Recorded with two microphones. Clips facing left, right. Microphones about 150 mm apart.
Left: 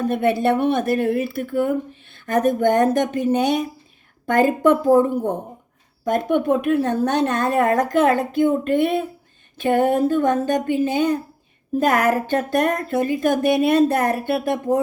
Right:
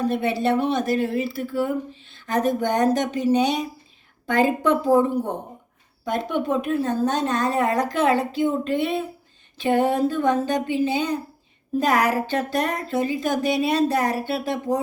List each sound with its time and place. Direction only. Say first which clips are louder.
0.0 s speech: left 3 dB; 50° left (ahead or behind)